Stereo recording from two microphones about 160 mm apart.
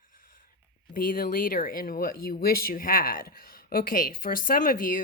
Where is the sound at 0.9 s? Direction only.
60° left (ahead or behind).